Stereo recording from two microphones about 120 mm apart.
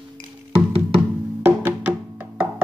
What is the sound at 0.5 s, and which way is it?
Music, 50° right (ahead or behind).